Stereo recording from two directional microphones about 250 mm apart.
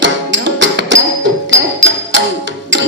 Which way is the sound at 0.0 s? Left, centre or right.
Right.